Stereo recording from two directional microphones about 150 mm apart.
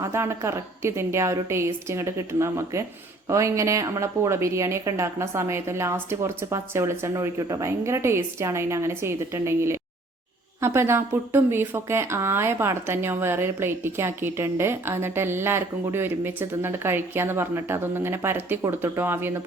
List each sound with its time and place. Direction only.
0.0 s a woman's voice: 20° right (ahead or behind)